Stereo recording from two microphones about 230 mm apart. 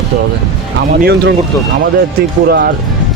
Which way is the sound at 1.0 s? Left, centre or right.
Right.